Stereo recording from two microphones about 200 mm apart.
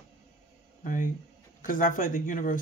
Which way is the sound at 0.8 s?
40° left (ahead or behind).